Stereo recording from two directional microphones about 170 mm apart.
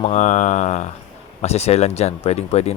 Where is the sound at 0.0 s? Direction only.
45° left (ahead or behind).